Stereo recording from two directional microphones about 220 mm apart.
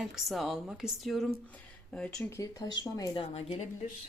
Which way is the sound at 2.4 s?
15° left (ahead or behind).